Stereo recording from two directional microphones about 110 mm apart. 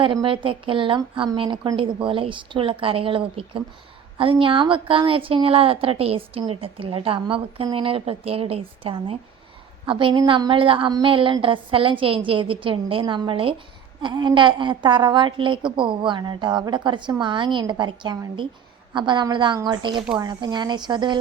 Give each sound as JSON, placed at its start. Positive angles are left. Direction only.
{"t": 0.0, "sound": "a woman's voice", "side_deg": -50}